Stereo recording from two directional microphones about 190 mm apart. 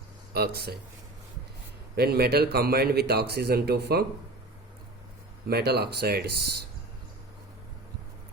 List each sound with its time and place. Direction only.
0.3 s a man's voice: 55° right (ahead or behind)
2.0 s a man's voice: 55° right (ahead or behind)
5.5 s a man's voice: 60° right (ahead or behind)